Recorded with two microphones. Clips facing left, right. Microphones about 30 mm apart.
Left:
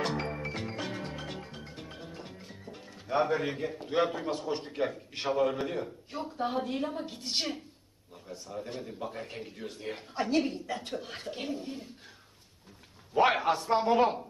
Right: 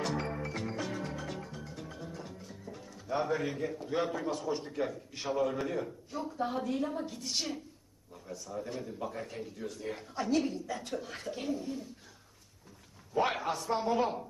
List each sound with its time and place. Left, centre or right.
0.0 s music: left
6.1 s speech: left
8.6 s speech: left
13.1 s speech: left